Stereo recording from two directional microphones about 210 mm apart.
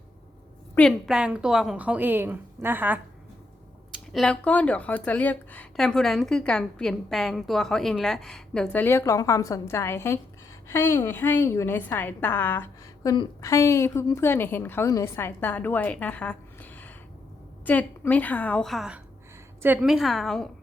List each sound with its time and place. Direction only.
0.8 s a woman's voice: centre (ahead or behind)